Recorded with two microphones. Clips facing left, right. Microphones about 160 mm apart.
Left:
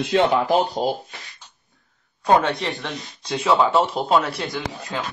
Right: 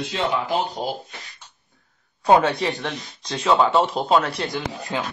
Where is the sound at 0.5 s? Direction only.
40° left (ahead or behind).